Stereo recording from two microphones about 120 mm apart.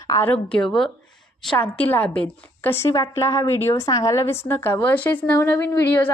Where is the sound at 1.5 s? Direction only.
15° left (ahead or behind).